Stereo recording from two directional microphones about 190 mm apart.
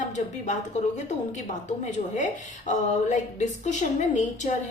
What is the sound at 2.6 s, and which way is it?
A woman's voice, 40° left (ahead or behind).